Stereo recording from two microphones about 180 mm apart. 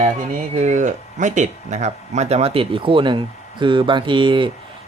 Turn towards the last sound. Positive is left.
turn(degrees=-25)  # may be behind; listen again after turning